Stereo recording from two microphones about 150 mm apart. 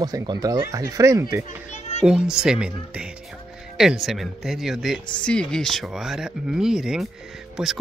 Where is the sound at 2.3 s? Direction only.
5° right (ahead or behind).